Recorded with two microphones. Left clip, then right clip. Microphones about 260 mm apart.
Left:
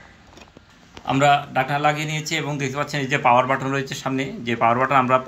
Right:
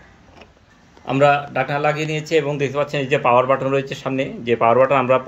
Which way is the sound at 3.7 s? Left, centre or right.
Centre.